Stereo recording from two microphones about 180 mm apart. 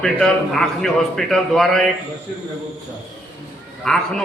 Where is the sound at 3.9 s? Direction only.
5° left (ahead or behind).